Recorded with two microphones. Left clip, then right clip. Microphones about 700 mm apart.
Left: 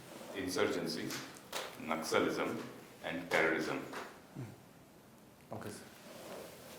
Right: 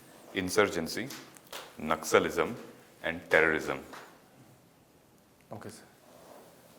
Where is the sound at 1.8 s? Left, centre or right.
Right.